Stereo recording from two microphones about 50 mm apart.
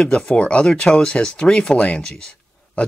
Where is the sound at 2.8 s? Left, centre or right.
Left.